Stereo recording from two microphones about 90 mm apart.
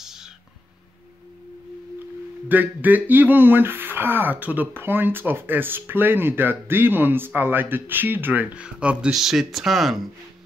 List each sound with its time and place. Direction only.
0.0 s whispering: 5° right (ahead or behind)
2.4 s speech: 20° right (ahead or behind); by 10.0 s centre (ahead or behind)